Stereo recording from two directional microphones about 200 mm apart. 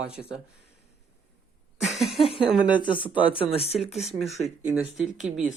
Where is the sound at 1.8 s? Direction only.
Centre (ahead or behind).